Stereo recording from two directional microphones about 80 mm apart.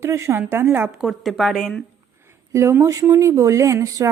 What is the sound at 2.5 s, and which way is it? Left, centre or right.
Speech, right.